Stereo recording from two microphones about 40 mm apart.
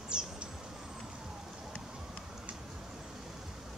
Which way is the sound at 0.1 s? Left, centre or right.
Centre.